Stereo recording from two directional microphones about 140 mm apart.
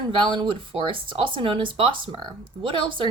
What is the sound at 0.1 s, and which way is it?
Speech, 35° right (ahead or behind).